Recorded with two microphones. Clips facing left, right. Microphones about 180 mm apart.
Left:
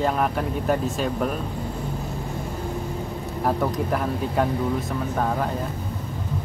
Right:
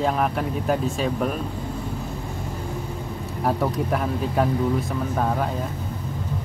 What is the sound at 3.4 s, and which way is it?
Speech, centre (ahead or behind).